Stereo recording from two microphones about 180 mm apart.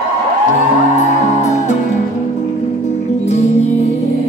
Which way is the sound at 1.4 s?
40° left (ahead or behind).